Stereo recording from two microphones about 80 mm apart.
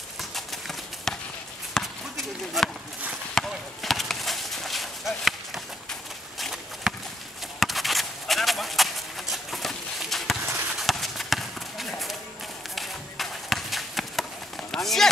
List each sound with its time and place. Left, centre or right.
0.2 s clip-clop: centre
1.7 s basketball bounce: centre
3.3 s chop: centre
6.4 s a sound: centre
10.7 s clip-clop: centre
12.7 s a sound: centre